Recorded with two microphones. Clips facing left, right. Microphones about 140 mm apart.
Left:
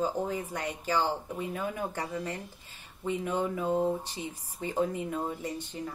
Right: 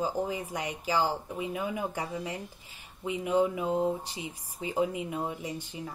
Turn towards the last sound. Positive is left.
turn(degrees=-10)  # may be behind; listen again after turning